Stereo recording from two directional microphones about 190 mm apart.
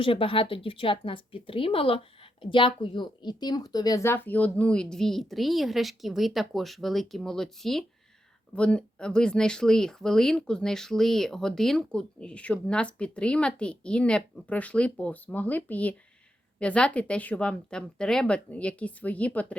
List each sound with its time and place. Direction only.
0.0 s a woman's voice: 30° left (ahead or behind); by 19.5 s 5° left (ahead or behind)